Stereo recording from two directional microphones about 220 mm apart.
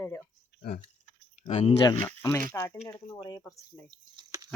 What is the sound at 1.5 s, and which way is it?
Speech, 30° left (ahead or behind).